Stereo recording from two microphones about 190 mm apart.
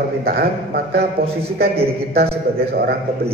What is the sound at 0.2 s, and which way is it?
A man's voice, 55° right (ahead or behind).